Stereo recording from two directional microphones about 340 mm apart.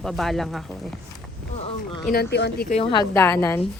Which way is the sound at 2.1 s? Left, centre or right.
Left.